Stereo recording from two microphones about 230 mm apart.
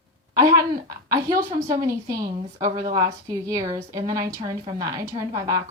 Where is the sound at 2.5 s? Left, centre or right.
Centre.